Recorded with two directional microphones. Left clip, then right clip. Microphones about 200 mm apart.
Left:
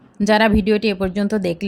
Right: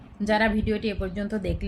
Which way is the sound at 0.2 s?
50° left (ahead or behind).